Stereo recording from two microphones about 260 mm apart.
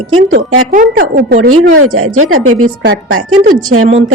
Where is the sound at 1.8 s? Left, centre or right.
Right.